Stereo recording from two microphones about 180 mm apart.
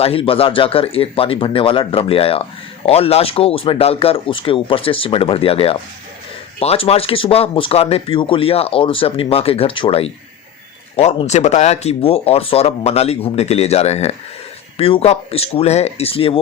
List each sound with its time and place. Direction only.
0.0 s speech: 30° left (ahead or behind)